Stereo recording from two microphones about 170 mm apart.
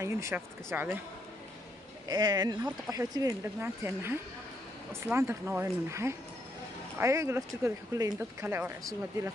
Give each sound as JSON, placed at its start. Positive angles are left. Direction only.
{"t": 0.0, "sound": "speech", "side_deg": -15}
{"t": 2.0, "sound": "speech", "side_deg": -25}